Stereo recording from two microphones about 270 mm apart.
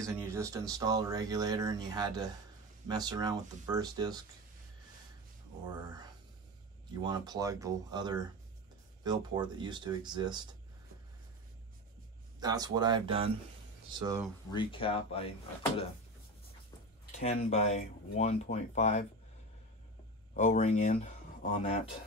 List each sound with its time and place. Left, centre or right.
0.0 s speech: centre
7.0 s speech: centre
12.4 s speech: centre
14.5 s speech: centre
17.2 s speech: left
20.3 s speech: left